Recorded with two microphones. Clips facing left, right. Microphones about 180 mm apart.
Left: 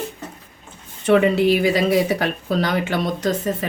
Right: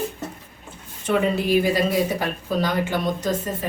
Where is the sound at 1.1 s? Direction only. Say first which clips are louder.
Left 5 dB; 70° left (ahead or behind).